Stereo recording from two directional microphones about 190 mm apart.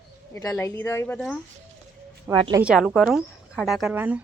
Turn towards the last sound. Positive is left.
turn(degrees=-10)  # may be behind; listen again after turning